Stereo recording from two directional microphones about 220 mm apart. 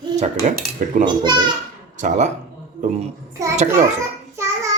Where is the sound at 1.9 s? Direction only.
35° right (ahead or behind).